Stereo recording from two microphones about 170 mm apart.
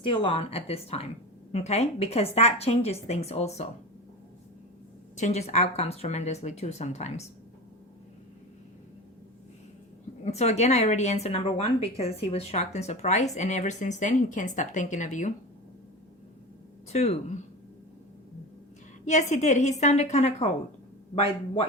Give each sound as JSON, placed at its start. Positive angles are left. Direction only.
{"t": 0.0, "sound": "a woman's voice", "side_deg": 30}
{"t": 5.1, "sound": "a woman's voice", "side_deg": 45}
{"t": 10.2, "sound": "a woman's voice", "side_deg": 40}
{"t": 16.9, "sound": "a woman's voice", "side_deg": 40}
{"t": 19.0, "sound": "a woman's voice", "side_deg": 45}